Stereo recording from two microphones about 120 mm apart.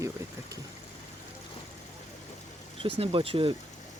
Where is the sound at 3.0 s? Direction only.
50° right (ahead or behind).